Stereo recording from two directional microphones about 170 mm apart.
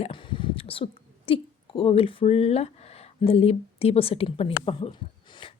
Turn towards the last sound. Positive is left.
turn(degrees=30)  # may be behind; listen again after turning